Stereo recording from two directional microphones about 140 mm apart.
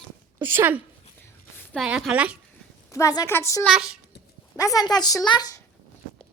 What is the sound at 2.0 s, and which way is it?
Speech, 5° right (ahead or behind).